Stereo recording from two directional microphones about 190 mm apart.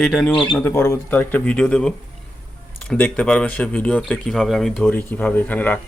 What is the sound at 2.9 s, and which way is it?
Speech, 5° left (ahead or behind).